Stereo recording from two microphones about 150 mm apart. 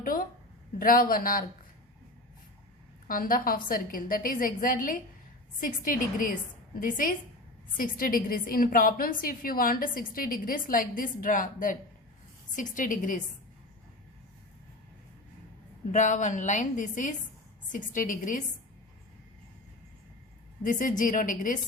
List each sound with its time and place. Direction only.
0.0 s a woman's voice: 70° left (ahead or behind)
3.1 s a woman's voice: 70° left (ahead or behind)
15.9 s a woman's voice: 55° left (ahead or behind)
20.7 s a woman's voice: 60° left (ahead or behind)